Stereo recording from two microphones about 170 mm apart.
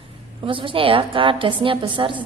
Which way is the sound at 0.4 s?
30° right (ahead or behind).